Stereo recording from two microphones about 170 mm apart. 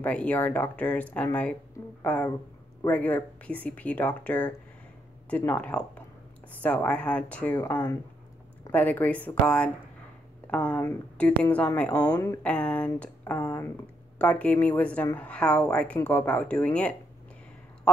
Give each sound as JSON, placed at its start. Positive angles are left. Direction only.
{"t": 0.0, "sound": "a woman's voice", "side_deg": 10}
{"t": 12.0, "sound": "speech", "side_deg": 20}
{"t": 12.4, "sound": "a woman's voice", "side_deg": 5}
{"t": 14.1, "sound": "a woman's voice", "side_deg": 5}